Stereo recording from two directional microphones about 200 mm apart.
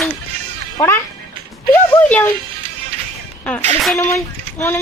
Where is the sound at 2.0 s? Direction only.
10° left (ahead or behind).